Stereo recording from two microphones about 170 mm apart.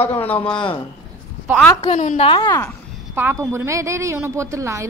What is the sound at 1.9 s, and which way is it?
Speech, 50° left (ahead or behind).